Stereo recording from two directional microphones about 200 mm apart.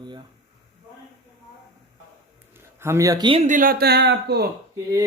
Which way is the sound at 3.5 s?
45° right (ahead or behind).